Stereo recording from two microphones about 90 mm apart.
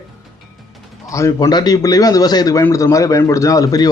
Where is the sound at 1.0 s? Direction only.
35° left (ahead or behind).